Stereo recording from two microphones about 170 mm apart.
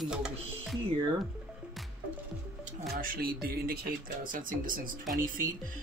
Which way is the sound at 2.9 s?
60° right (ahead or behind).